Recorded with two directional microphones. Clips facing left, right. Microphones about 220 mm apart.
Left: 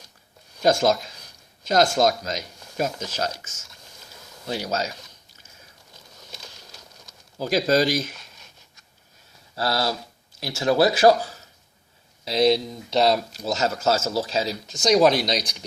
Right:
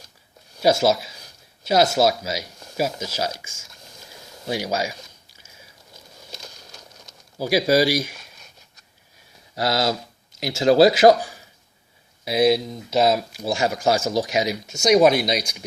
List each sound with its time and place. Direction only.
0.6 s speech: 5° right (ahead or behind)
7.3 s speech: 10° right (ahead or behind)
9.6 s a man's voice: 20° right (ahead or behind)